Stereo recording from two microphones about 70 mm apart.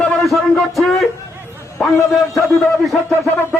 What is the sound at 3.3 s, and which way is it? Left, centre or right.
Speech, left.